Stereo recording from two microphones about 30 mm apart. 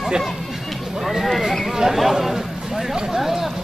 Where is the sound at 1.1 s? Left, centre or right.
Centre.